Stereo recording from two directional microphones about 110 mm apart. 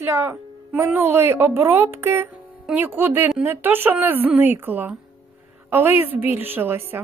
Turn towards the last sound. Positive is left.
turn(degrees=-20)  # may be behind; listen again after turning